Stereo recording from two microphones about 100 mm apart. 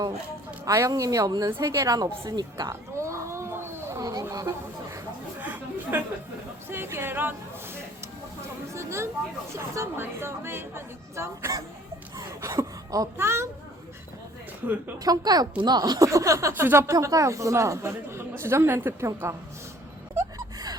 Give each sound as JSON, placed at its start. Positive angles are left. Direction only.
{"t": 0.6, "sound": "speech", "side_deg": -35}
{"t": 2.3, "sound": "a sound", "side_deg": -40}
{"t": 5.4, "sound": "chatter", "side_deg": -20}
{"t": 6.7, "sound": "speech", "side_deg": -25}
{"t": 8.7, "sound": "a sound", "side_deg": -30}
{"t": 9.6, "sound": "speech", "side_deg": -25}
{"t": 12.1, "sound": "a sound", "side_deg": -35}
{"t": 13.1, "sound": "speech", "side_deg": -25}
{"t": 14.9, "sound": "speech", "side_deg": -40}